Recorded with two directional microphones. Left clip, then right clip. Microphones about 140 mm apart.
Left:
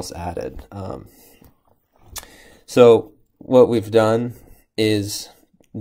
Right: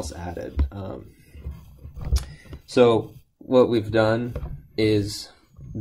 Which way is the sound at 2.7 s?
35° left (ahead or behind).